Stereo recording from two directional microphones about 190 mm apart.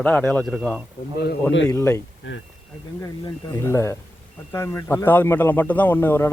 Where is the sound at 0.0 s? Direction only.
5° left (ahead or behind).